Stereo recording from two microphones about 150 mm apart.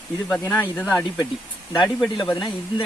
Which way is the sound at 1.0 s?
25° left (ahead or behind).